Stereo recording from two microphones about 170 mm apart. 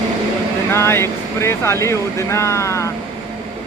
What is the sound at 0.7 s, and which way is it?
Speech, 15° left (ahead or behind).